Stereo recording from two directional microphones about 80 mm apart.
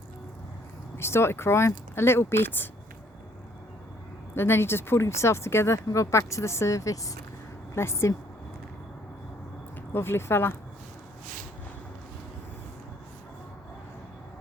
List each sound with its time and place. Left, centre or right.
0.9 s speech: left
4.4 s speech: left
7.7 s speech: left
9.9 s speech: left